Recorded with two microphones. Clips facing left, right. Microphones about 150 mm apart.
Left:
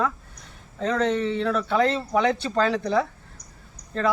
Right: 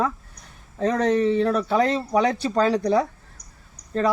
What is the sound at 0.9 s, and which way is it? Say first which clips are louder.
Speech: right 3 dB; 40° right (ahead or behind).